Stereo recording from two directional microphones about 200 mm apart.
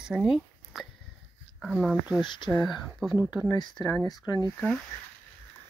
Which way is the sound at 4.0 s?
20° left (ahead or behind).